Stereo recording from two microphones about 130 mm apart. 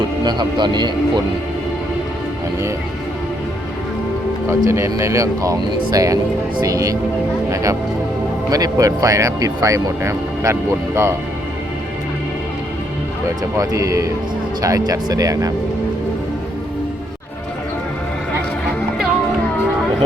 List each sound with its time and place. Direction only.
0.3 s speech: 35° right (ahead or behind)
4.4 s speech: 20° right (ahead or behind)
13.2 s speech: 25° right (ahead or behind)